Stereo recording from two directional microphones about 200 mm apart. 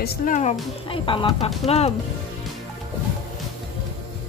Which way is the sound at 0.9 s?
25° left (ahead or behind).